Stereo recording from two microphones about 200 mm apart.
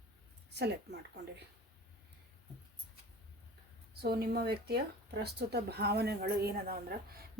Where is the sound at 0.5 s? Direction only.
55° right (ahead or behind).